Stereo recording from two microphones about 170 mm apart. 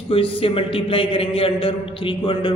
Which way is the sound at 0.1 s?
30° left (ahead or behind).